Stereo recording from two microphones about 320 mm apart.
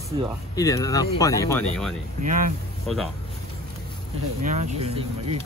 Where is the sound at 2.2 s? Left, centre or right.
Right.